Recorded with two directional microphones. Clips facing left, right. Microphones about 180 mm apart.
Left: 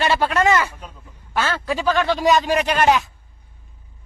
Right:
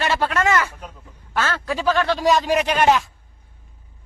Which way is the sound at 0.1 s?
15° left (ahead or behind).